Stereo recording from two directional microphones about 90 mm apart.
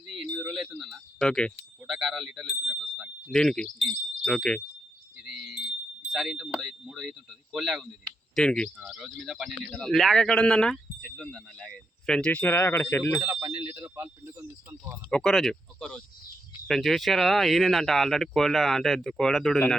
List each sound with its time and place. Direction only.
0.3 s a sound: 5° right (ahead or behind)
1.3 s speech: 10° left (ahead or behind)
1.5 s bicycle bell: 5° right (ahead or behind)
3.0 s speech: 5° left (ahead or behind)
5.2 s wind chime: centre (ahead or behind)
6.1 s speech: 5° right (ahead or behind)
8.0 s speech: 10° left (ahead or behind)
8.8 s speech: centre (ahead or behind); by 13.1 s 25° left (ahead or behind)
13.5 s speech: 20° right (ahead or behind)
14.3 s speech: 35° right (ahead or behind)
15.1 s speech: 5° left (ahead or behind)